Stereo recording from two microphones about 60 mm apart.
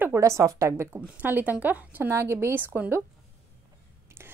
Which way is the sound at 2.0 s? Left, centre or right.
Right.